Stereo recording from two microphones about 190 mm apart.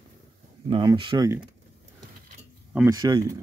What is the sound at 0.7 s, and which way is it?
Speech, 25° right (ahead or behind).